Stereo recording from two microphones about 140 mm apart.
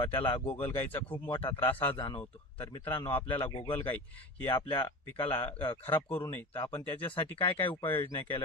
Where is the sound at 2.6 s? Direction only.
35° left (ahead or behind).